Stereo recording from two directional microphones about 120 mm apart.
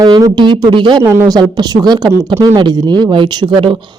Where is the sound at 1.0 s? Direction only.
20° right (ahead or behind).